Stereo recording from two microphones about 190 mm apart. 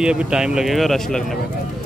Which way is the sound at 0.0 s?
5° right (ahead or behind).